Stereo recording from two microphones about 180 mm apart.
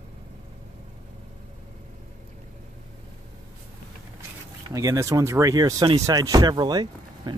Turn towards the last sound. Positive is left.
turn(degrees=-20)  # may be behind; listen again after turning